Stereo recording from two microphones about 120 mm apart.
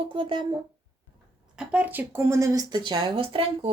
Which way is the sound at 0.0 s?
45° right (ahead or behind).